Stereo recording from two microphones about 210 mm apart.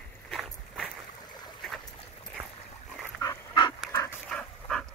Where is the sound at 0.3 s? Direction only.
Centre (ahead or behind).